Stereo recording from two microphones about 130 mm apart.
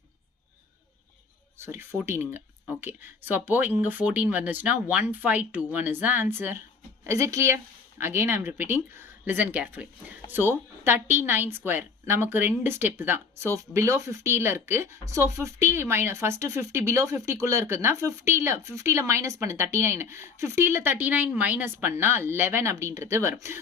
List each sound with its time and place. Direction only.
1.5 s a woman's voice: 20° right (ahead or behind)